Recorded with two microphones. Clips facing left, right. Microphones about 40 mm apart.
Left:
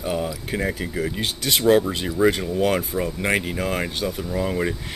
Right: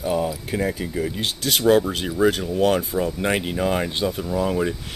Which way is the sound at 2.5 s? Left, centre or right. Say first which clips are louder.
Right 2 dB; centre.